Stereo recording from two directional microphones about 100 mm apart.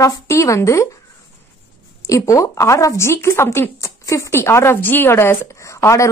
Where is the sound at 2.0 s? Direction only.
30° left (ahead or behind).